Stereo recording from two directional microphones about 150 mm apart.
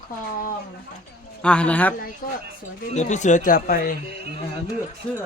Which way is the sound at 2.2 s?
70° left (ahead or behind).